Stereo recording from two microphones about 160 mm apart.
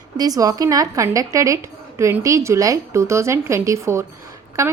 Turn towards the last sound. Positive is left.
turn(degrees=-20)  # may be behind; listen again after turning